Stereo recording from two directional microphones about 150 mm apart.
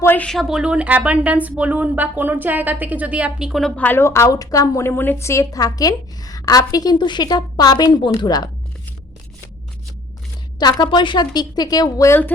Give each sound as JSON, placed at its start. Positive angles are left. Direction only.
{"t": 0.0, "sound": "speech", "side_deg": 10}
{"t": 3.8, "sound": "a woman's voice", "side_deg": 15}
{"t": 10.6, "sound": "a woman's voice", "side_deg": 30}